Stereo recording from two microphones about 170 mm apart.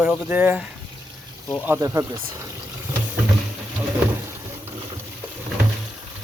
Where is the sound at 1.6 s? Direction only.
15° right (ahead or behind).